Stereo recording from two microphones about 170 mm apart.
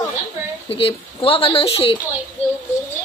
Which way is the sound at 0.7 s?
35° left (ahead or behind).